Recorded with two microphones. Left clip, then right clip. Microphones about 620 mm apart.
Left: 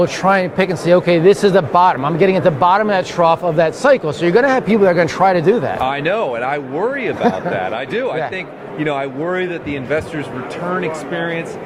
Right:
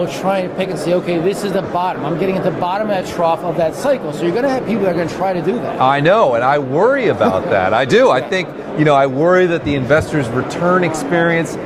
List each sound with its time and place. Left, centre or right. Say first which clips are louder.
0.0 s speech: left 3 dB; left
5.8 s a man's voice: right 6 dB; right